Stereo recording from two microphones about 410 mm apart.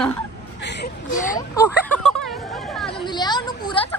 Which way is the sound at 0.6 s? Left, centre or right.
Left.